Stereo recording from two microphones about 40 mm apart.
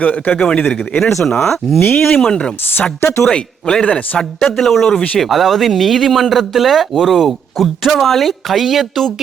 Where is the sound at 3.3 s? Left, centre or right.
Left.